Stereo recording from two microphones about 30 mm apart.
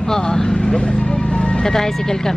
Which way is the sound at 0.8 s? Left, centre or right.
Left.